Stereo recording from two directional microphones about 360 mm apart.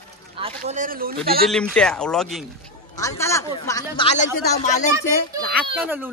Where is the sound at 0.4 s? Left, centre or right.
Centre.